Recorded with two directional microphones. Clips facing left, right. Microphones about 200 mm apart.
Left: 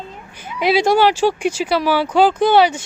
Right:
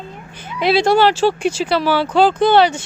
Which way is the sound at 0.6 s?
10° left (ahead or behind).